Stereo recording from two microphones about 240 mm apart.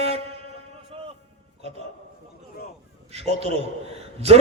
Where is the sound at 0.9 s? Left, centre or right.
Right.